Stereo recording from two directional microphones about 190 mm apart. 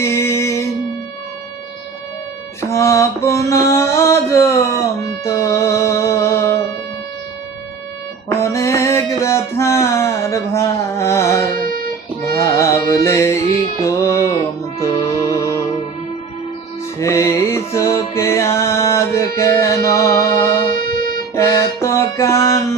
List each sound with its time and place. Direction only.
0.0 s music: 15° left (ahead or behind)
2.6 s music: 15° left (ahead or behind)
8.3 s a sound: 15° left (ahead or behind)
12.2 s music: 15° left (ahead or behind)
17.0 s music: 15° left (ahead or behind)
21.3 s music: 15° left (ahead or behind)